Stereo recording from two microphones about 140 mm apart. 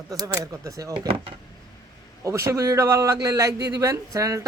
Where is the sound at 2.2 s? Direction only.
20° right (ahead or behind).